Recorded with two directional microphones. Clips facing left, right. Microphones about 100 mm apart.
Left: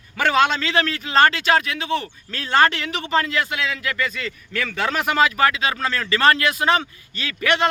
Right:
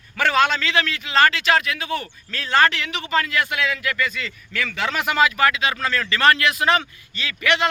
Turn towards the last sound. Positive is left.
turn(degrees=35)  # may be behind; listen again after turning